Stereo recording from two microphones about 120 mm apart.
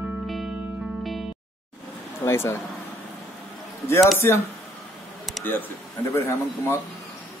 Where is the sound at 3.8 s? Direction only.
20° left (ahead or behind).